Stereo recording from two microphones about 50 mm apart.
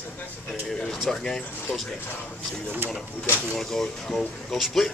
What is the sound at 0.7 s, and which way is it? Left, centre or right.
Speech, centre.